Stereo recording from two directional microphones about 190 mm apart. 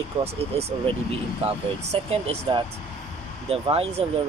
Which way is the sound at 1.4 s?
30° right (ahead or behind).